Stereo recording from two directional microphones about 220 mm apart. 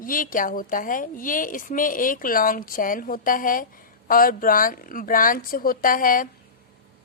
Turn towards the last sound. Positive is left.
turn(degrees=40)  # may be behind; listen again after turning